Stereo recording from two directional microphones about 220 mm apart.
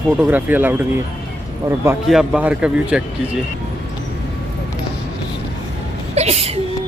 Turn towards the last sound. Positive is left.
turn(degrees=-30)  # may be behind; listen again after turning